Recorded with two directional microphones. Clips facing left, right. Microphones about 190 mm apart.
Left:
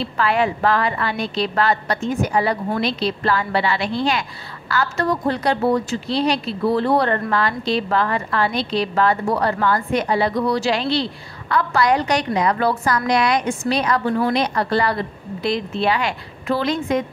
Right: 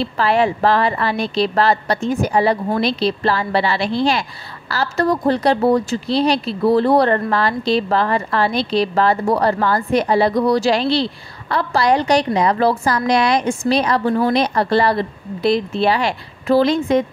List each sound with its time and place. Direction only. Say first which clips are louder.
0.2 s a woman's voice: right 3 dB; 30° right (ahead or behind)